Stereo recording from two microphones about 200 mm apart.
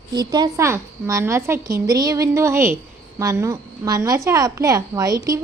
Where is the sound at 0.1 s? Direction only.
20° right (ahead or behind).